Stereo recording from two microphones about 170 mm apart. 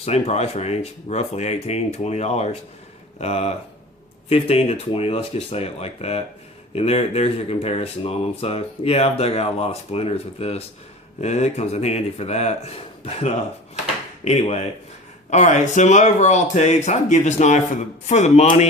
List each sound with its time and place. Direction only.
0.0 s speech: 40° left (ahead or behind)